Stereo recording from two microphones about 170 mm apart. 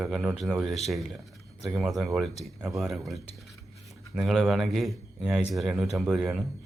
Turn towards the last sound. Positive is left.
turn(degrees=0)  # may be behind; listen again after turning